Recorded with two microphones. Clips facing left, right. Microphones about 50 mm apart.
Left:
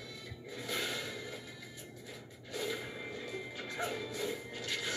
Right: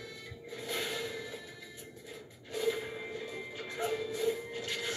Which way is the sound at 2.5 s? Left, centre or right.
Right.